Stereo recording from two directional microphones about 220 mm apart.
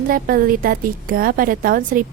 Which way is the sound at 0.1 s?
40° right (ahead or behind).